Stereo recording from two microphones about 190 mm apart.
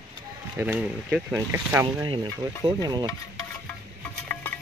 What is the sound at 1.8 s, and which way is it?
Stir, 25° right (ahead or behind).